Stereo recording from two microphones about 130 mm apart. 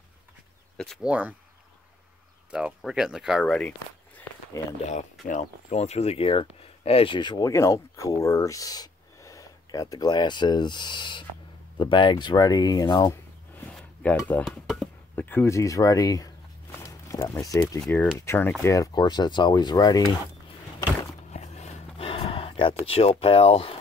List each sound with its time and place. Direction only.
1.0 s speech: 10° right (ahead or behind)
2.5 s speech: 5° right (ahead or behind)
5.2 s speech: 70° left (ahead or behind); by 13.1 s 30° left (ahead or behind)
13.7 s a sound: 10° left (ahead or behind)
14.1 s speech: 15° left (ahead or behind)
14.4 s speech: centre (ahead or behind)
15.1 s speech: 15° left (ahead or behind); by 20.2 s 30° left (ahead or behind)
21.3 s a sound: 60° left (ahead or behind)
22.8 s speech: 45° left (ahead or behind)